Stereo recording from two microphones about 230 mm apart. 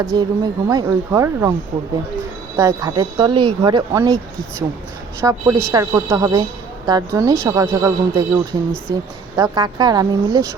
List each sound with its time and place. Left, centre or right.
0.0 s speech: centre
2.6 s speech: centre
5.2 s speech: centre